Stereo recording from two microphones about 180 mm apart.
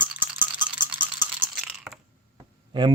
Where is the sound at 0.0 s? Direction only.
10° right (ahead or behind).